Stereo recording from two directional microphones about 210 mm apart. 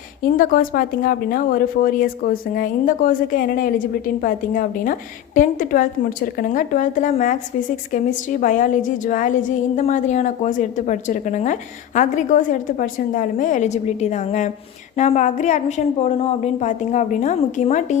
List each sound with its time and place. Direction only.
0.2 s a woman's voice: 40° left (ahead or behind)